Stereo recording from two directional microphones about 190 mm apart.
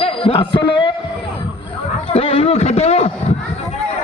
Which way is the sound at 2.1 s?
30° left (ahead or behind).